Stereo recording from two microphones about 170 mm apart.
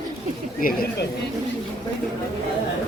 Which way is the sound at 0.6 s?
60° left (ahead or behind).